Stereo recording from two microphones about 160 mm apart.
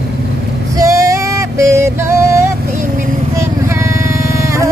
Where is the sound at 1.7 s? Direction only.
15° right (ahead or behind).